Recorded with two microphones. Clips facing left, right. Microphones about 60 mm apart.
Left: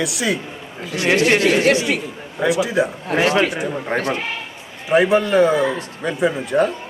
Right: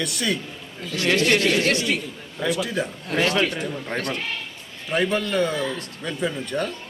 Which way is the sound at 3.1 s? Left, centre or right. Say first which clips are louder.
Left 4 dB; left.